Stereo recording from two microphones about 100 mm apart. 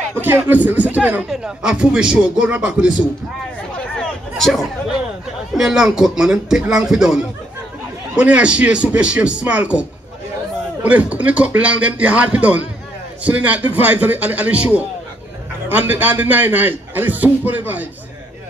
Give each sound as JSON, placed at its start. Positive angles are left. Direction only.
{"t": 0.2, "sound": "a man's voice", "side_deg": -20}
{"t": 4.0, "sound": "a sound", "side_deg": 0}
{"t": 5.5, "sound": "a man's voice", "side_deg": -5}